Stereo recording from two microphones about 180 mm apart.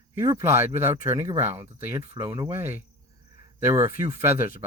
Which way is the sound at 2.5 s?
15° right (ahead or behind).